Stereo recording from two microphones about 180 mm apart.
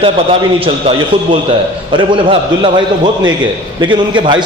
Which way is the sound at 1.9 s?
30° right (ahead or behind).